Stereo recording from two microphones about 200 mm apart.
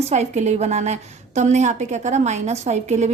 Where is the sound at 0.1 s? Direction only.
35° right (ahead or behind).